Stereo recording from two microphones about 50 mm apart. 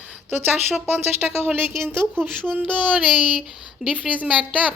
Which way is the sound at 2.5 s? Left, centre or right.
Right.